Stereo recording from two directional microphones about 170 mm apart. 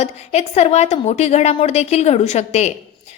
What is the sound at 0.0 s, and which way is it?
A woman's voice, 40° left (ahead or behind).